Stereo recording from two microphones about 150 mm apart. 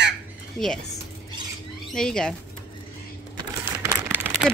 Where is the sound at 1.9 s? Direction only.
5° left (ahead or behind).